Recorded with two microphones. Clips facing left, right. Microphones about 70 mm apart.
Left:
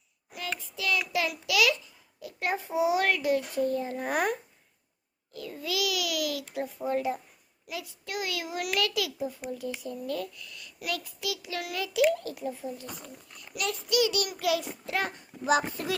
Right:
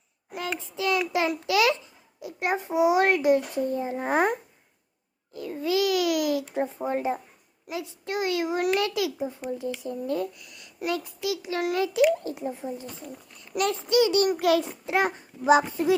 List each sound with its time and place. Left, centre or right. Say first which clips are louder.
0.5 s a child's voice: right 4 dB; right
2.2 s a child's voice: right 4 dB; right
13.5 s a child's voice: right 6 dB; right
14.6 s a child's voice: right 6 dB; right